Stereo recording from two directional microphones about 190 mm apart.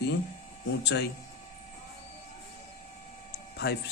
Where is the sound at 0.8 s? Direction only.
65° left (ahead or behind).